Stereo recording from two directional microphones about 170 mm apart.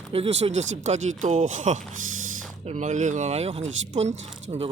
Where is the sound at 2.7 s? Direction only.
45° right (ahead or behind).